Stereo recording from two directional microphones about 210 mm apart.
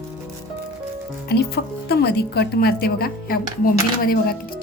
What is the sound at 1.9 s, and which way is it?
A woman's voice, 50° left (ahead or behind).